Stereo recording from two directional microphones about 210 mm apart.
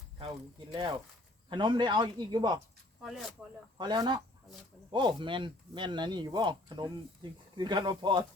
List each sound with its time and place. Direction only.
0.7 s speech: 20° right (ahead or behind)
3.0 s speech: centre (ahead or behind)
3.8 s speech: 20° right (ahead or behind)